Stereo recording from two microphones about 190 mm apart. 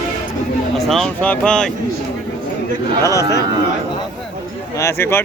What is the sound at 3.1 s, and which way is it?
Speech, 15° left (ahead or behind).